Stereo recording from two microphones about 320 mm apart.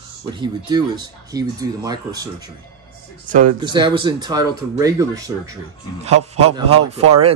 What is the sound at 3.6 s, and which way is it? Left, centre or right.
Speech, centre.